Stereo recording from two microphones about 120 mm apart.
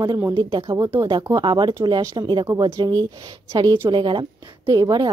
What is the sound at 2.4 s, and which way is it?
A woman's voice, 25° right (ahead or behind).